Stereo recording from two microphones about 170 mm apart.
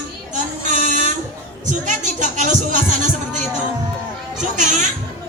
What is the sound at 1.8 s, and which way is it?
Speech, 45° right (ahead or behind).